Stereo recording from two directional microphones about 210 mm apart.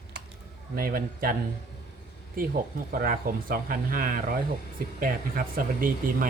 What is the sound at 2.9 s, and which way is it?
Speech, 45° right (ahead or behind).